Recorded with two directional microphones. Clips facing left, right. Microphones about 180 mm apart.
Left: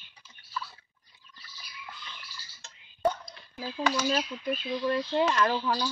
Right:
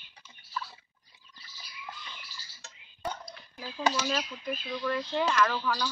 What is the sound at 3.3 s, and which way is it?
Speech, 30° left (ahead or behind).